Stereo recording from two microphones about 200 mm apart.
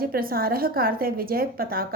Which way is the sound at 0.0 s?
45° right (ahead or behind).